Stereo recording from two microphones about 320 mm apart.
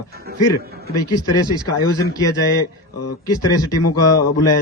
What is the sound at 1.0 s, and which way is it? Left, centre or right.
A man's voice, centre.